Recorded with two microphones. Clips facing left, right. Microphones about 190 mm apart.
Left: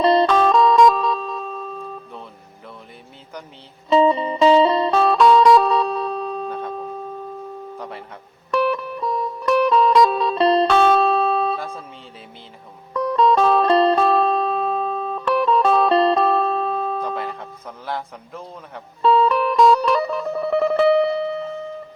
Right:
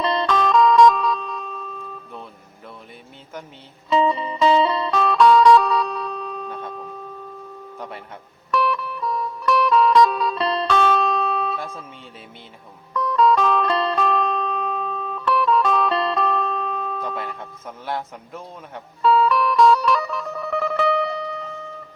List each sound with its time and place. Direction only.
0.0 s music: 30° left (ahead or behind)
3.8 s music: 35° left (ahead or behind)
7.8 s a sound: centre (ahead or behind)
8.4 s music: 30° left (ahead or behind)
12.9 s music: 30° left (ahead or behind)
17.0 s a sound: centre (ahead or behind)
19.0 s music: 30° left (ahead or behind)